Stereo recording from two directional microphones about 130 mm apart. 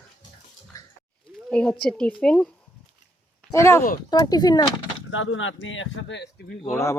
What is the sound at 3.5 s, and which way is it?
Speech, 20° left (ahead or behind).